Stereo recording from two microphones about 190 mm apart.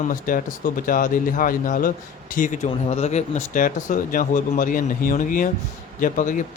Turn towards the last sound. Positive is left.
turn(degrees=45)  # may be behind; listen again after turning